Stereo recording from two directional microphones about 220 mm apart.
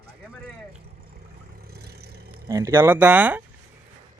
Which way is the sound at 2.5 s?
15° right (ahead or behind).